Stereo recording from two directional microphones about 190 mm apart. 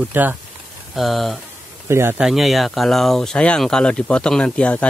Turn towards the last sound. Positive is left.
turn(degrees=5)  # may be behind; listen again after turning